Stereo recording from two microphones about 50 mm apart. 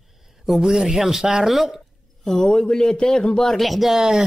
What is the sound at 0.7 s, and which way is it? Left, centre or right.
A man's voice, centre.